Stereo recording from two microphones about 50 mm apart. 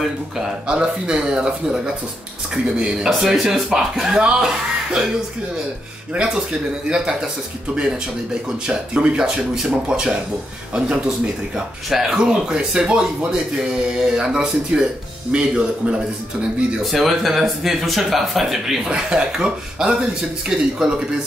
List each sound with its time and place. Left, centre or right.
0.4 s speech: centre
3.1 s speech: centre
6.9 s speech: centre
8.5 s speech: centre
16.8 s speech: centre